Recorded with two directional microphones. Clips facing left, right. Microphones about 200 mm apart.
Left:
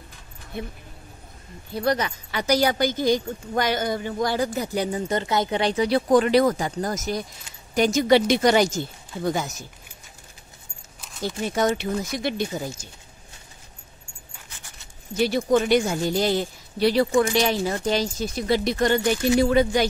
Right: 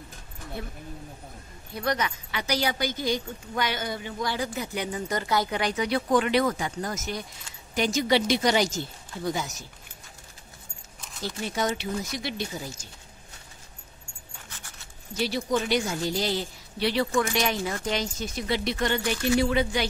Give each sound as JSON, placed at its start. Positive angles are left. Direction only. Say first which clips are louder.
{"t": 1.7, "sound": "speech", "louder": "left 5 dB", "side_deg": 30}
{"t": 11.4, "sound": "speech", "louder": "left 6 dB", "side_deg": 50}
{"t": 15.1, "sound": "speech", "louder": "left 6 dB", "side_deg": 50}